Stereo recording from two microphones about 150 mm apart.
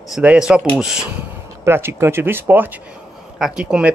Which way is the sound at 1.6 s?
15° right (ahead or behind).